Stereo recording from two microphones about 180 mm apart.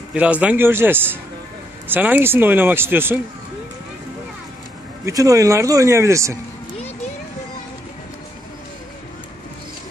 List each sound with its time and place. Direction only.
0.1 s speech: 5° right (ahead or behind)
5.0 s speech: 20° right (ahead or behind)